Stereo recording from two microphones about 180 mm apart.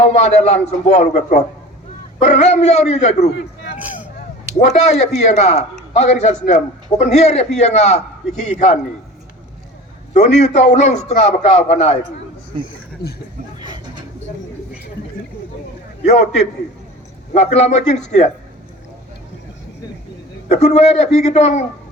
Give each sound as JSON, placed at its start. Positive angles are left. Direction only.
{"t": 0.1, "sound": "a man's voice", "side_deg": 35}
{"t": 4.6, "sound": "a man's voice", "side_deg": 40}
{"t": 10.2, "sound": "a man's voice", "side_deg": 40}
{"t": 13.6, "sound": "a sound", "side_deg": -25}
{"t": 16.0, "sound": "a man's voice", "side_deg": 40}
{"t": 20.5, "sound": "a man's voice", "side_deg": 40}